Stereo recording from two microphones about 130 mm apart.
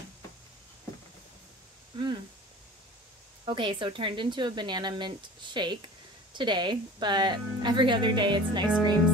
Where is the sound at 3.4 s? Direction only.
40° right (ahead or behind).